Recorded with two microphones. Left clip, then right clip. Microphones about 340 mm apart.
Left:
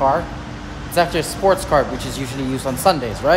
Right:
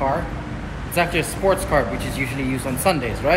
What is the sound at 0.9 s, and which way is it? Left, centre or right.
A man's voice, centre.